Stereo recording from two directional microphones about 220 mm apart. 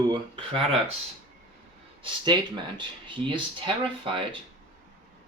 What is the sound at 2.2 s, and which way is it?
Speech, 20° right (ahead or behind).